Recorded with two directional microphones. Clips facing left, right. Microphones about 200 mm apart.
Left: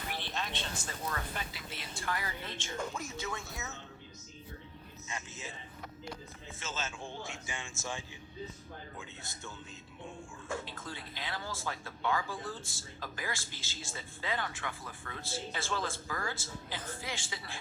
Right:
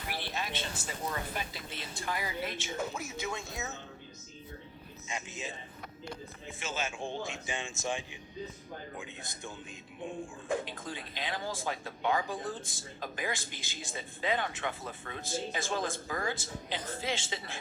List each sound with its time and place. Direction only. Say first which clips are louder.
0.1 s a sound: right 3 dB; 10° right (ahead or behind)
1.4 s a man's voice: right 3 dB; 15° right (ahead or behind)
5.0 s a man's voice: right 4 dB; 15° right (ahead or behind)
6.6 s a man's voice: right 4 dB; 15° right (ahead or behind)